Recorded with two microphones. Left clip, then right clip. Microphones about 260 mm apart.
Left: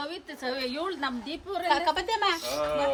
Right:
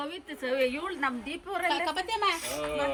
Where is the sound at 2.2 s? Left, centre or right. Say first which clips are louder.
Left 2 dB; left.